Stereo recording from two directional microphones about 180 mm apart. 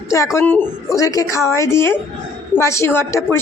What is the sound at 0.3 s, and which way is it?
A woman's voice, 10° left (ahead or behind).